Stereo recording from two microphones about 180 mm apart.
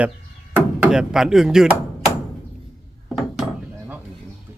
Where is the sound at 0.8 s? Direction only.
5° right (ahead or behind).